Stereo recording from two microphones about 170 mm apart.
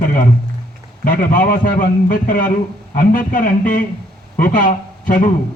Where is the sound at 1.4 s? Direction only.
55° left (ahead or behind).